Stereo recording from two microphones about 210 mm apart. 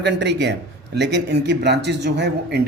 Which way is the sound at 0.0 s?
55° right (ahead or behind).